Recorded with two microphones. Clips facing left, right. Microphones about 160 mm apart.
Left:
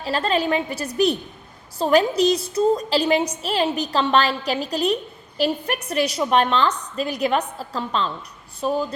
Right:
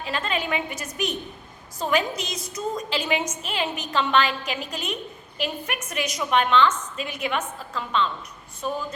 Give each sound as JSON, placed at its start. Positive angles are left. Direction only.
{"t": 0.0, "sound": "a woman's voice", "side_deg": 35}